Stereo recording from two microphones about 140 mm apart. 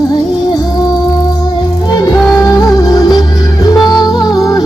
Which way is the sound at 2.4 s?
25° left (ahead or behind).